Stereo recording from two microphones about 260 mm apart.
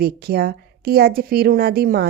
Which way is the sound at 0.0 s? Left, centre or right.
Right.